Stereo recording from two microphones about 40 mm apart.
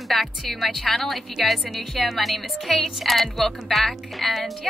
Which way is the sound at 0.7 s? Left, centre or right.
Centre.